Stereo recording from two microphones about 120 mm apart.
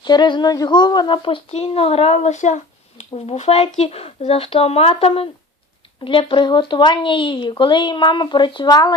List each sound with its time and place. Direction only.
0.0 s speech: 40° left (ahead or behind)